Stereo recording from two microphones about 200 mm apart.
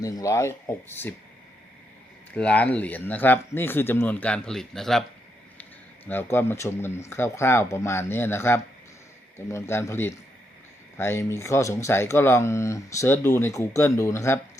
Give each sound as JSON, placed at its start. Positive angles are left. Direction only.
{"t": 0.0, "sound": "speech", "side_deg": 15}
{"t": 2.3, "sound": "speech", "side_deg": 5}
{"t": 6.1, "sound": "speech", "side_deg": 10}